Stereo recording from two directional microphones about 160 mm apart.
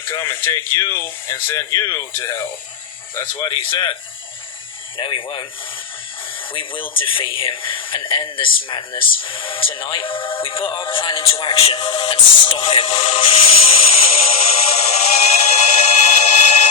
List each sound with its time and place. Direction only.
0.0 s speech: 20° left (ahead or behind)
3.7 s speech: 30° left (ahead or behind)
4.9 s speech: 30° left (ahead or behind)
6.5 s speech: 30° left (ahead or behind)
11.3 s music: 35° left (ahead or behind)